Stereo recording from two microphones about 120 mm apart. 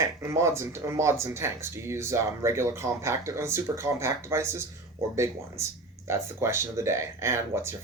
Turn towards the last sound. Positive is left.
turn(degrees=-20)  # may be behind; listen again after turning